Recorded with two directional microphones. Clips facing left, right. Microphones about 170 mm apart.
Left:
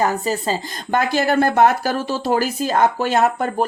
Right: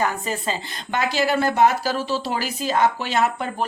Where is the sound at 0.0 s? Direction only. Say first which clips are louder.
Left 4 dB; 35° left (ahead or behind).